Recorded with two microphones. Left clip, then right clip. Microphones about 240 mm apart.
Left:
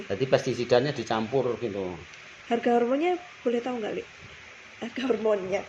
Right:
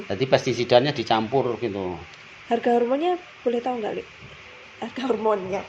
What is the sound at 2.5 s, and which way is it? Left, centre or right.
Speech, centre.